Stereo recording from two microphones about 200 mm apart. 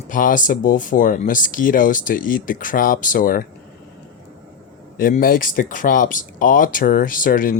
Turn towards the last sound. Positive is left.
turn(degrees=45)  # may be behind; listen again after turning